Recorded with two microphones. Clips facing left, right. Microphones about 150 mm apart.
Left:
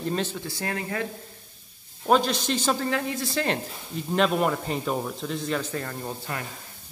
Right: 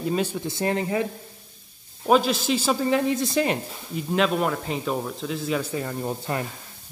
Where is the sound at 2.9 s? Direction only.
20° right (ahead or behind).